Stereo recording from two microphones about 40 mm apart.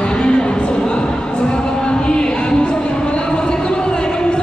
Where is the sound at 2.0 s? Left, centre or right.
Left.